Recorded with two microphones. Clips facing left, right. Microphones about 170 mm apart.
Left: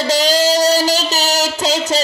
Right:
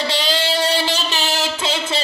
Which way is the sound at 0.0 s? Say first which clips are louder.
Left 7 dB; 40° left (ahead or behind).